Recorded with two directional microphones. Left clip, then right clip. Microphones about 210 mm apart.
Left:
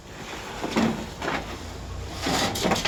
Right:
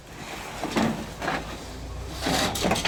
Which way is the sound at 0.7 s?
30° right (ahead or behind).